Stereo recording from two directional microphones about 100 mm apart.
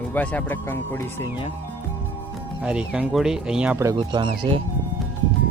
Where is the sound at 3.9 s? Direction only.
55° right (ahead or behind).